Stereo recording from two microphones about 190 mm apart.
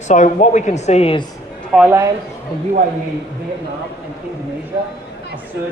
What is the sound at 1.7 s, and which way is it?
Speech, 5° right (ahead or behind).